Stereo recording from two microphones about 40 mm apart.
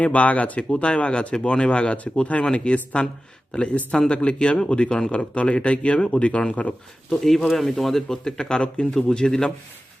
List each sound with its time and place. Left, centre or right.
0.0 s speech: left
7.1 s speech: centre
8.2 s speech: centre
8.9 s speech: centre